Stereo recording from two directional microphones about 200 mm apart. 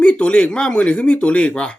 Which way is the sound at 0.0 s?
5° left (ahead or behind).